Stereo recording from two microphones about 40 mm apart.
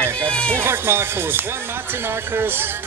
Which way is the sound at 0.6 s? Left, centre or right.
Right.